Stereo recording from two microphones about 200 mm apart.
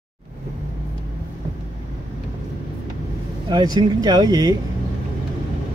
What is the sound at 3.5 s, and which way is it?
Speech, 20° right (ahead or behind).